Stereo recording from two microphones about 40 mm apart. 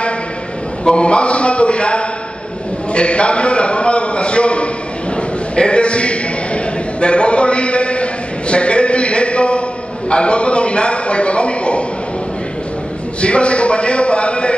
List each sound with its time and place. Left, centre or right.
0.8 s a man's voice: left
5.1 s a sound: left
13.2 s a man's voice: left